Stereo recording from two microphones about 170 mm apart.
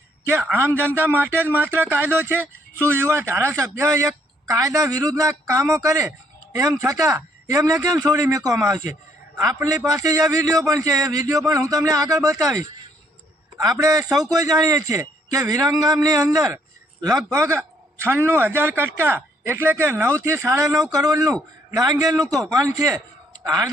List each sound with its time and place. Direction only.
0.5 s a man's voice: 15° right (ahead or behind)